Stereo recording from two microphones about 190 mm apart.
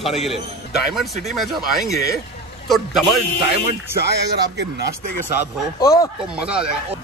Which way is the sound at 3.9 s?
60° right (ahead or behind).